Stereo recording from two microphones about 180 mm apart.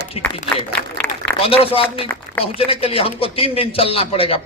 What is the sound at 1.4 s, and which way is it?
A man's voice, 30° left (ahead or behind).